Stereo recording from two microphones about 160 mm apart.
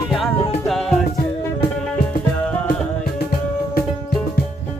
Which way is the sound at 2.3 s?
5° left (ahead or behind).